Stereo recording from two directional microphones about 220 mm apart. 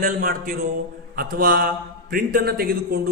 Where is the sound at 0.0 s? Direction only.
40° right (ahead or behind).